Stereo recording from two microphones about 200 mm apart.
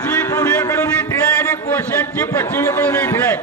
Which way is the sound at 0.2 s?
10° left (ahead or behind).